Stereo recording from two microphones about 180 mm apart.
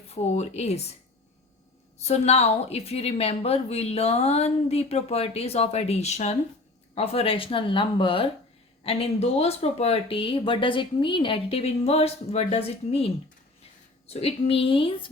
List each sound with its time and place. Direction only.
0.1 s a woman's voice: 35° left (ahead or behind)
2.0 s a woman's voice: 35° left (ahead or behind)
14.1 s a woman's voice: 35° left (ahead or behind)